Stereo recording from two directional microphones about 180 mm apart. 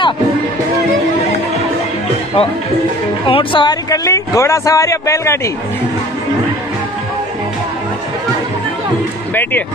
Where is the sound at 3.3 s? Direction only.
30° left (ahead or behind).